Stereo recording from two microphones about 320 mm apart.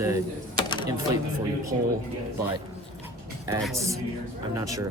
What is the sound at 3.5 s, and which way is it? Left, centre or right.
Speech, centre.